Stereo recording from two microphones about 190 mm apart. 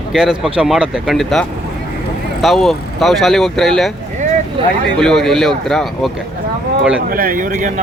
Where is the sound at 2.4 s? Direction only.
Centre (ahead or behind).